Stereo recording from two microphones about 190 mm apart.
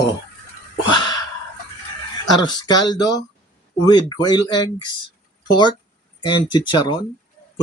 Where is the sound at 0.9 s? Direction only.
25° left (ahead or behind).